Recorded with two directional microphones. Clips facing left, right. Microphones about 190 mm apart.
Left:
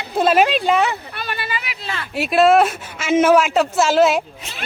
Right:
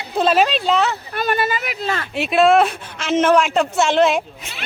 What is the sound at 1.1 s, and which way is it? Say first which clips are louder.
Speech: right 7 dB; 45° right (ahead or behind).